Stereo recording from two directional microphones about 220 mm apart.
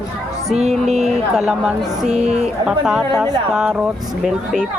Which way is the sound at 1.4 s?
5° right (ahead or behind).